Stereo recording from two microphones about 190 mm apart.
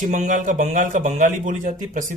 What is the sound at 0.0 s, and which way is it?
Speech, 40° right (ahead or behind).